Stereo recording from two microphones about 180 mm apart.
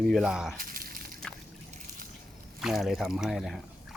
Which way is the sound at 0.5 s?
50° right (ahead or behind).